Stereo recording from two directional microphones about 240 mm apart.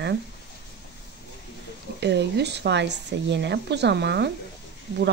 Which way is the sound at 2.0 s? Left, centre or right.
Right.